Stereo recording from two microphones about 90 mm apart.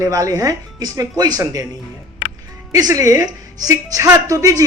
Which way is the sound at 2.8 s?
40° right (ahead or behind).